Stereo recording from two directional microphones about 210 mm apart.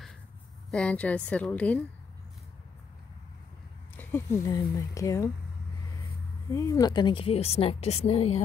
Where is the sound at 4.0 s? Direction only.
15° left (ahead or behind).